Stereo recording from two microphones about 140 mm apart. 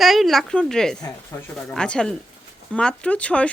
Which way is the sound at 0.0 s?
Centre (ahead or behind).